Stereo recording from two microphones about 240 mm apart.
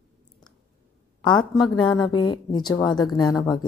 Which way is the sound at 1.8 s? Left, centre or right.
Centre.